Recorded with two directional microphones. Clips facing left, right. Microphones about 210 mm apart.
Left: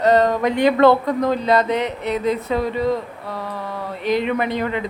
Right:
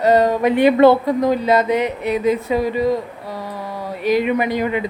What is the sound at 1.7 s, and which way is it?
Speech, 15° right (ahead or behind).